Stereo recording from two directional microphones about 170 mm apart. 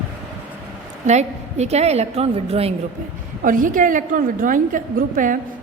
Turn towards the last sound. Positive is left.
turn(degrees=-50)  # may be behind; listen again after turning